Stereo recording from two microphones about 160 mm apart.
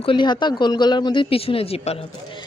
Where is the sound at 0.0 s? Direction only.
30° left (ahead or behind).